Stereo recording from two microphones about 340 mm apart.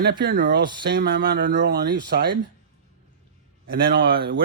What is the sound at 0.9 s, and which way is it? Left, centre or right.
A man's voice, right.